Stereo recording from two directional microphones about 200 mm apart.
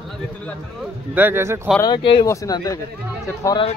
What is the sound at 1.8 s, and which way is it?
Speech, 20° left (ahead or behind).